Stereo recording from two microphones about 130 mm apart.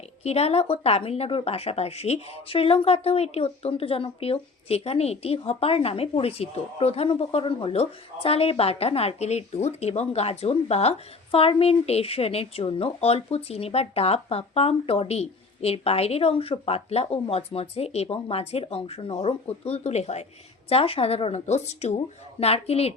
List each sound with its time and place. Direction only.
0.2 s speech: 55° left (ahead or behind)